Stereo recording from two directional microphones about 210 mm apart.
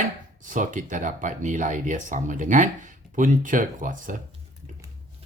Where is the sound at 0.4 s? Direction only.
35° right (ahead or behind).